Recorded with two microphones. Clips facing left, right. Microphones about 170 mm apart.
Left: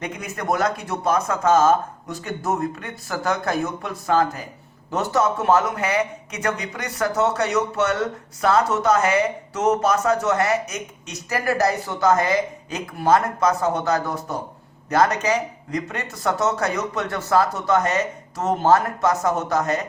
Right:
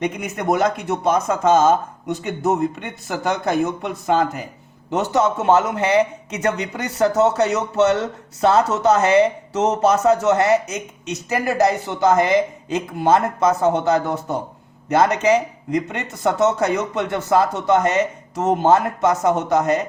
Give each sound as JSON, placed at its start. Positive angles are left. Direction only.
{"t": 0.0, "sound": "speech", "side_deg": -20}